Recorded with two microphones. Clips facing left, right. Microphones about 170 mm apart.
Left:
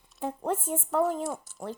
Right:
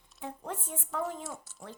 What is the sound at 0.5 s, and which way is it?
Speech, 50° left (ahead or behind).